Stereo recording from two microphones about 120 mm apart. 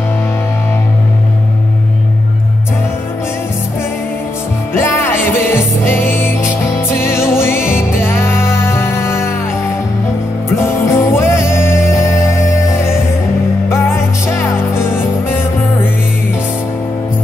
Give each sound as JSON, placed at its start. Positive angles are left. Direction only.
{"t": 4.7, "sound": "music", "side_deg": 20}
{"t": 10.6, "sound": "music", "side_deg": 20}